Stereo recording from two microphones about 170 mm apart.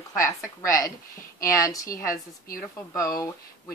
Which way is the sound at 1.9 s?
55° left (ahead or behind).